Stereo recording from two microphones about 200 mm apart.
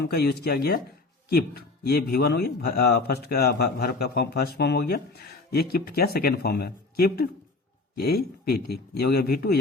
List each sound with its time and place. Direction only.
0.0 s speech: 55° left (ahead or behind)